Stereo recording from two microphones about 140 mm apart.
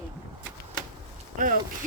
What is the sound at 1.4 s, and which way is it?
Speech, 70° right (ahead or behind).